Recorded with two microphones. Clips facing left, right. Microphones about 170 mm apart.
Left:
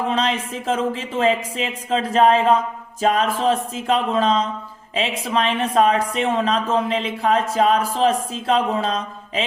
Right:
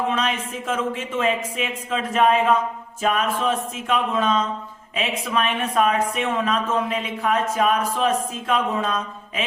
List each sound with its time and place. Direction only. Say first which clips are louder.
0.1 s speech: left 3 dB; 35° left (ahead or behind)